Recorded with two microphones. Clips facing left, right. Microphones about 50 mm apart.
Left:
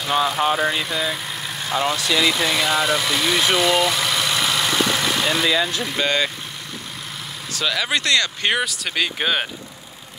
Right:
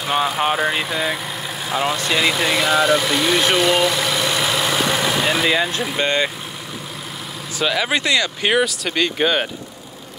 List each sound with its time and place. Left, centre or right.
0.0 s speech: centre
2.0 s speech: centre
2.3 s vehicle: centre
5.5 s speech: right
5.8 s speech: centre
7.5 s speech: centre